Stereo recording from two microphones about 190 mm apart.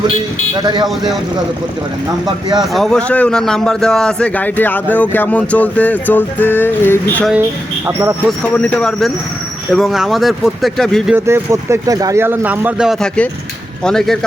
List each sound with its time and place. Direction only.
0.5 s speech: 20° right (ahead or behind)
2.6 s a man's voice: centre (ahead or behind)
8.5 s speech: 5° left (ahead or behind)
11.3 s speech: 15° right (ahead or behind); by 14.2 s centre (ahead or behind)